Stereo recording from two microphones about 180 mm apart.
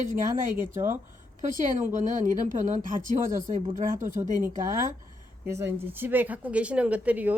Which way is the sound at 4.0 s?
45° right (ahead or behind).